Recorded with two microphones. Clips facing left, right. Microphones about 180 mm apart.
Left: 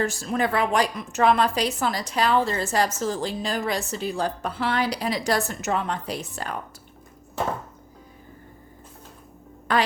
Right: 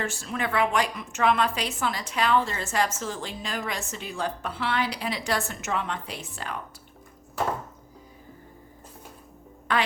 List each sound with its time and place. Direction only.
0.0 s a woman's voice: 40° left (ahead or behind)
9.7 s speech: 40° left (ahead or behind)